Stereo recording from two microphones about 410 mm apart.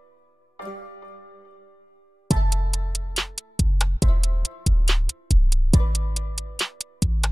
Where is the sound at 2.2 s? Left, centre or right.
Centre.